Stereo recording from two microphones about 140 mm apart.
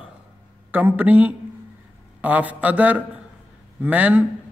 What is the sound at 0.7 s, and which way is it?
A man's voice, 15° right (ahead or behind).